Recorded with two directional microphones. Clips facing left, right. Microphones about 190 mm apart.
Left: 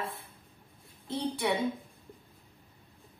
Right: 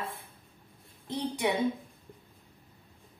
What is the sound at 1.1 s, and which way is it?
Speech, 20° right (ahead or behind).